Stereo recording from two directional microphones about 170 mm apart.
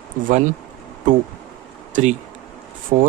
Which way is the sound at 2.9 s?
45° right (ahead or behind).